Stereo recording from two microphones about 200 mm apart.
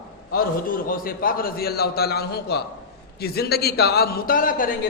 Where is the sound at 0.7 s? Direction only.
45° left (ahead or behind).